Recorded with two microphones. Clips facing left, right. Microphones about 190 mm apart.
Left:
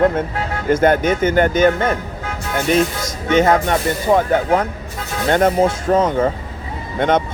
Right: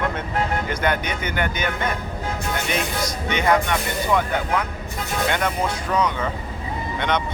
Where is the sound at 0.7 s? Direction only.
45° left (ahead or behind).